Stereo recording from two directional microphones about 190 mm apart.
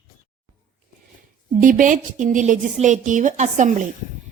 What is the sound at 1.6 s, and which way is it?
Speech, 45° right (ahead or behind).